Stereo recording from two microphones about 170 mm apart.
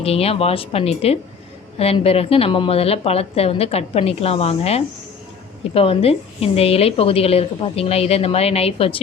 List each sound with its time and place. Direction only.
0.0 s a woman's voice: 35° left (ahead or behind)